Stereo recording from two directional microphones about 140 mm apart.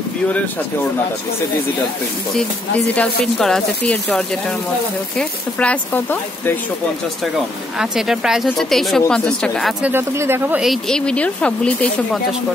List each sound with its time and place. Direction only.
2.9 s speech: 5° left (ahead or behind)
7.3 s speech: 5° right (ahead or behind)
9.8 s speech: 15° right (ahead or behind)
10.6 s speech: centre (ahead or behind)